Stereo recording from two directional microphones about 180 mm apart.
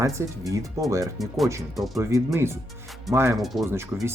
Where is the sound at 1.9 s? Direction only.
15° right (ahead or behind).